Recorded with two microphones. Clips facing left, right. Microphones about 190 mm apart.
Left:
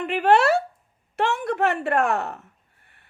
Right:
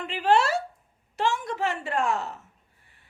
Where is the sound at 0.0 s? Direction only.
60° left (ahead or behind).